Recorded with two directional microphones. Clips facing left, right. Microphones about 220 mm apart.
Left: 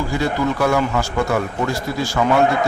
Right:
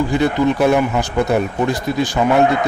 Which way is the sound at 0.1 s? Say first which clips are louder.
Right 4 dB; 20° right (ahead or behind).